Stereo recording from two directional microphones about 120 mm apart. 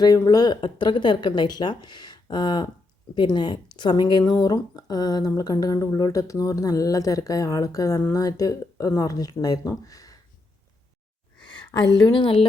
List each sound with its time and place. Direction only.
0.0 s speech: 30° left (ahead or behind)
11.7 s speech: 35° left (ahead or behind)